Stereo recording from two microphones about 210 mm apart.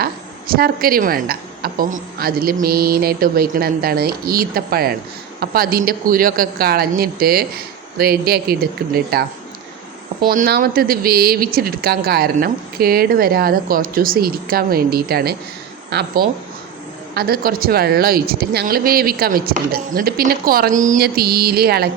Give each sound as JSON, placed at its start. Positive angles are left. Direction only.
{"t": 0.0, "sound": "a woman's voice", "side_deg": -45}
{"t": 10.2, "sound": "a woman's voice", "side_deg": -45}